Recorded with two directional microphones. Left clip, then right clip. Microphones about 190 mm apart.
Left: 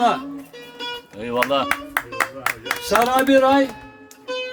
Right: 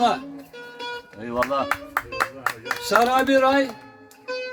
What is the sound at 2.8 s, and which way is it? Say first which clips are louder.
Speech: left 1 dB; 10° right (ahead or behind).